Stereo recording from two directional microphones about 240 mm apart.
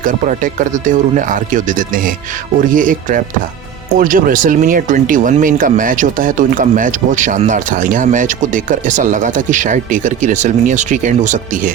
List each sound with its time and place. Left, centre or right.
0.0 s speech: right